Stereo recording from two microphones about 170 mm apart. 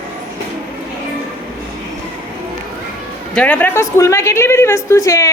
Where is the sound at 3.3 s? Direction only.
10° left (ahead or behind).